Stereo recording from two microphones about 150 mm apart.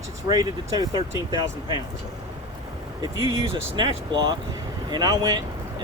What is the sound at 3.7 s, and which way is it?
Speech, 30° right (ahead or behind).